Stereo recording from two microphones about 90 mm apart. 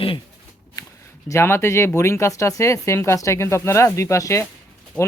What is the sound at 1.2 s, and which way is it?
Speech, 30° left (ahead or behind).